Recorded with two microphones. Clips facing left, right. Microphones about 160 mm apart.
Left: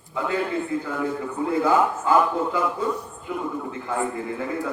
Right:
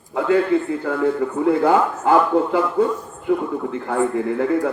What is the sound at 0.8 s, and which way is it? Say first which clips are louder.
A man's voice: right 7 dB; 60° right (ahead or behind).